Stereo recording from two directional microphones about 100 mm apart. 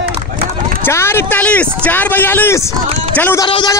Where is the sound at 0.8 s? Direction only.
25° left (ahead or behind).